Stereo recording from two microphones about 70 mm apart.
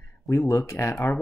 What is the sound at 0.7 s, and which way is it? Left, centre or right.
Speech, left.